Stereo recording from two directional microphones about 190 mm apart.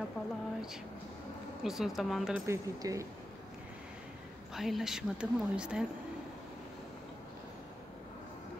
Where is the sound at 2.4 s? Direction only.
15° right (ahead or behind).